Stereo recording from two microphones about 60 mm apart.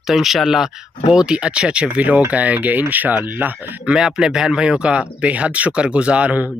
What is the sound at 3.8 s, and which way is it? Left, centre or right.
Speech, centre.